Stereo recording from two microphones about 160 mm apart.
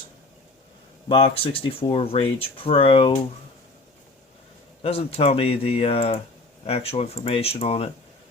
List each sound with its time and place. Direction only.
1.0 s speech: 35° left (ahead or behind)
4.8 s speech: 40° left (ahead or behind)